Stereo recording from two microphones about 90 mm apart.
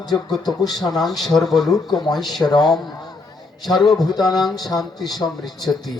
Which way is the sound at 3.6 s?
Centre (ahead or behind).